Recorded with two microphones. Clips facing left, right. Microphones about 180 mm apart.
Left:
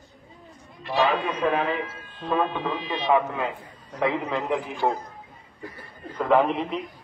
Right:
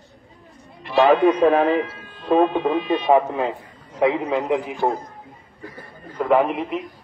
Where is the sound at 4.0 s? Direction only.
20° right (ahead or behind).